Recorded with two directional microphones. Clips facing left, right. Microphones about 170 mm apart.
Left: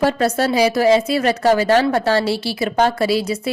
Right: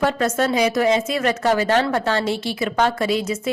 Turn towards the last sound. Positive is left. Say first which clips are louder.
# left 3 dB
turn(degrees=35)  # may be behind; listen again after turning